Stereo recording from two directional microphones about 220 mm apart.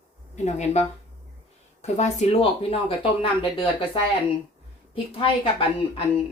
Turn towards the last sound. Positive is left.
turn(degrees=25)  # may be behind; listen again after turning